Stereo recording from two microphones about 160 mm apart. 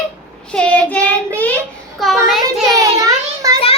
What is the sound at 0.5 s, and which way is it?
Child singing, 10° left (ahead or behind).